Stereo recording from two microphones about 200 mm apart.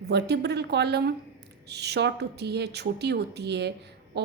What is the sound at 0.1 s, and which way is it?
A woman's voice, 55° right (ahead or behind).